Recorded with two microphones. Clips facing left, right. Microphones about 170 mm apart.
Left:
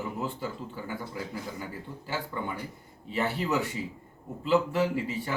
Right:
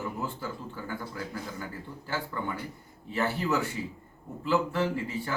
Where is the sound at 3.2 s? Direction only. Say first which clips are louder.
Even; 20° left (ahead or behind).